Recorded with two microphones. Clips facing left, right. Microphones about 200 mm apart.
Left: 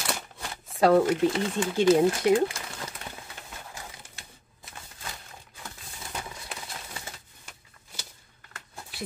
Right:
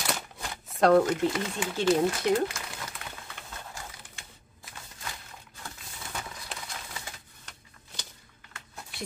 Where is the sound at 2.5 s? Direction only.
30° left (ahead or behind).